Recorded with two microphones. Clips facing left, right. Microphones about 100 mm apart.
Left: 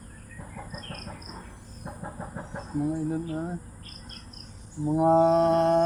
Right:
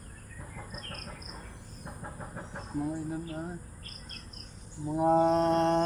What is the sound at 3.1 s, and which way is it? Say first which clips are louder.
Speech: left 6 dB; 25° left (ahead or behind).